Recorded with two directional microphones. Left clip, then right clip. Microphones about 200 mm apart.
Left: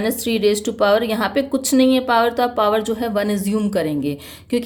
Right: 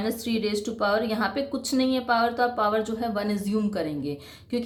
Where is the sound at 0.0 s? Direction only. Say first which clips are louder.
Left 10 dB; 40° left (ahead or behind).